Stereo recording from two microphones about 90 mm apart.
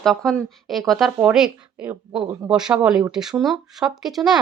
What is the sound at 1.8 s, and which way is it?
Speech, 20° right (ahead or behind).